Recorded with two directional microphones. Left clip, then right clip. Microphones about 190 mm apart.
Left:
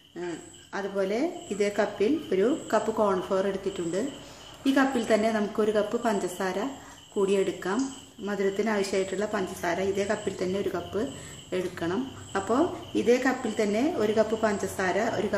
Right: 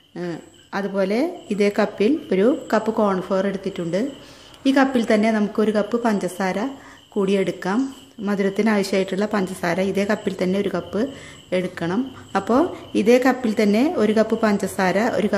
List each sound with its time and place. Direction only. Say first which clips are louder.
0.7 s a woman's voice: right 7 dB; 50° right (ahead or behind)